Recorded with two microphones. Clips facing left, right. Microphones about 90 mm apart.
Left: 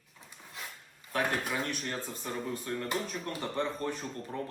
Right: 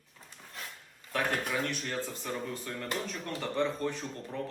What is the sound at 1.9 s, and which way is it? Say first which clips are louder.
A man's voice: right 2 dB; 25° left (ahead or behind).